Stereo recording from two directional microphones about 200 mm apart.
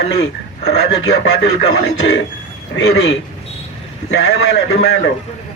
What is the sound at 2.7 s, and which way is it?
Speech, 60° left (ahead or behind).